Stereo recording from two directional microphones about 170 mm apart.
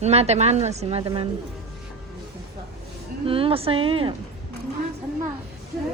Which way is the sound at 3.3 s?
35° right (ahead or behind).